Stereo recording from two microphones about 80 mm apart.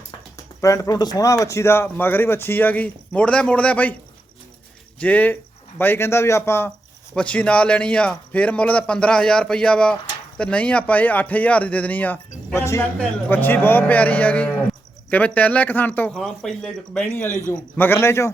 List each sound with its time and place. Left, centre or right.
0.6 s speech: left; by 3.9 s centre
4.9 s speech: centre
7.2 s a man's voice: centre
12.5 s speech: left
13.0 s speech: left
16.1 s a man's voice: centre
17.1 s speech: left